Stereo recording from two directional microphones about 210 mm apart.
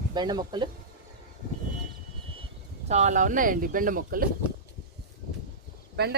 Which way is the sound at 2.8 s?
35° right (ahead or behind).